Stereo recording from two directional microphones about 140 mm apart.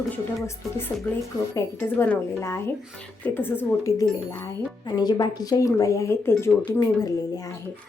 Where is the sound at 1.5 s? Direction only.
15° left (ahead or behind).